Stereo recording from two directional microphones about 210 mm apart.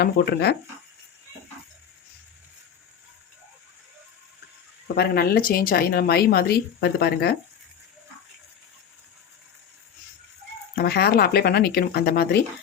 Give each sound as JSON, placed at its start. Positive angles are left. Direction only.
{"t": 0.0, "sound": "a woman's voice", "side_deg": 50}
{"t": 4.9, "sound": "a woman's voice", "side_deg": 45}
{"t": 10.8, "sound": "a woman's voice", "side_deg": 50}